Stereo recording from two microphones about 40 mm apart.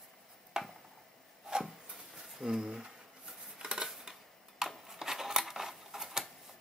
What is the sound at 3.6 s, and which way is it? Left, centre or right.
Dishes, centre.